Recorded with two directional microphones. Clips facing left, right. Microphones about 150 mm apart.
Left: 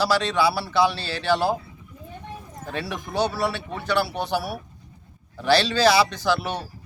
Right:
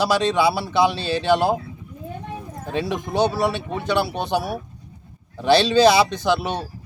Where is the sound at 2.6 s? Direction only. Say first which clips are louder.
Right 6 dB; 20° right (ahead or behind).